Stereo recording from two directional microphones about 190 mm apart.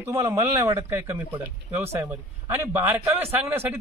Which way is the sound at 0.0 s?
15° right (ahead or behind).